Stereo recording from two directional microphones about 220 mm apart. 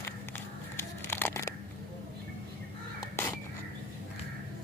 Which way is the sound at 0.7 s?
10° left (ahead or behind).